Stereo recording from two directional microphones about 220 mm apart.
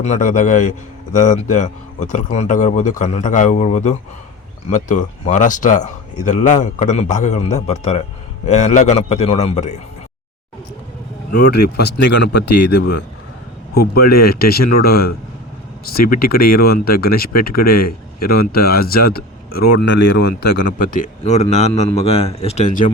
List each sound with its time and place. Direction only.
0.0 s speech: 35° left (ahead or behind)
11.3 s speech: 45° left (ahead or behind)
20.4 s speech: 40° left (ahead or behind)